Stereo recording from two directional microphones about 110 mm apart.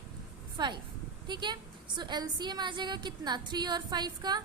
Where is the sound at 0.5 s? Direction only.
45° right (ahead or behind).